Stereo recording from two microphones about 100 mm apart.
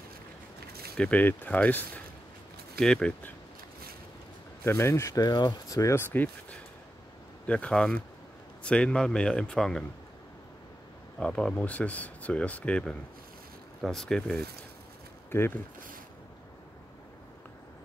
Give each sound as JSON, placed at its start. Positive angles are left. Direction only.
{"t": 0.9, "sound": "speech", "side_deg": 10}
{"t": 4.6, "sound": "speech", "side_deg": 25}
{"t": 5.3, "sound": "speech", "side_deg": 45}
{"t": 6.1, "sound": "speech", "side_deg": 15}
{"t": 11.1, "sound": "speech", "side_deg": 5}
{"t": 15.3, "sound": "speech", "side_deg": 25}